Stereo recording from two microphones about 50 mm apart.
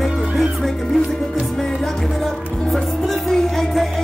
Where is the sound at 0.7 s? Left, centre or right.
Centre.